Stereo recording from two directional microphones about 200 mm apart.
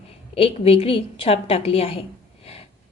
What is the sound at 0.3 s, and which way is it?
A woman's voice, 30° left (ahead or behind).